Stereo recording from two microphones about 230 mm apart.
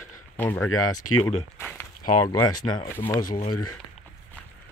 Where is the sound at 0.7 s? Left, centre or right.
Left.